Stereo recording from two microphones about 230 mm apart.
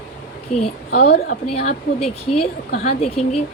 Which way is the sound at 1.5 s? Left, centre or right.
Left.